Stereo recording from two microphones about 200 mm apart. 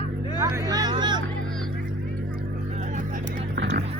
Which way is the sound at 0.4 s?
20° right (ahead or behind).